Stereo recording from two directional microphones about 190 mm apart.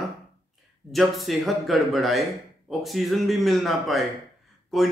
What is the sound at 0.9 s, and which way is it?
Speech, centre (ahead or behind).